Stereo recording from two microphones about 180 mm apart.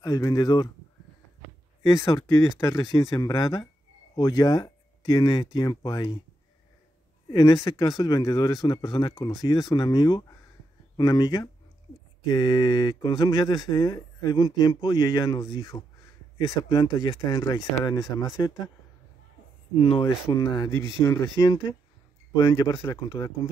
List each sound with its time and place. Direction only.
0.0 s speech: 20° left (ahead or behind)
1.8 s speech: 25° left (ahead or behind)
7.2 s speech: 20° left (ahead or behind)
19.8 s speech: 30° left (ahead or behind)